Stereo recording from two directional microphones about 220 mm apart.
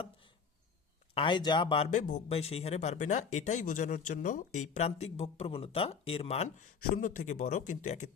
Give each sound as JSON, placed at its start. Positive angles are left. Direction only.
{"t": 1.1, "sound": "speech", "side_deg": 20}